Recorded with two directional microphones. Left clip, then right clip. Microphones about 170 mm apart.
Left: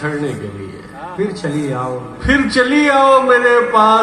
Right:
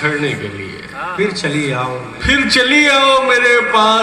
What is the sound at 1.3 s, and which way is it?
A man's voice, 45° left (ahead or behind).